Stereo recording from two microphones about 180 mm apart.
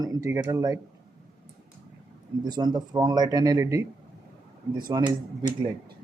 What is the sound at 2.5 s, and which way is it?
Speech, 25° right (ahead or behind).